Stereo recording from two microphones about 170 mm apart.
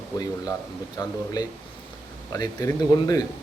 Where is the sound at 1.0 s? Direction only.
20° left (ahead or behind).